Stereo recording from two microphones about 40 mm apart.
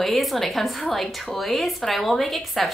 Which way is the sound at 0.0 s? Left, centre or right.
Centre.